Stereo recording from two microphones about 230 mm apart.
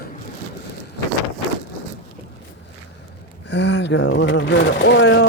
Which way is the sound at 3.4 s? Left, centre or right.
Left.